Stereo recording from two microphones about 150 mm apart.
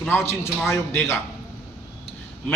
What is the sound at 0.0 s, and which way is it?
A man's voice, 15° left (ahead or behind).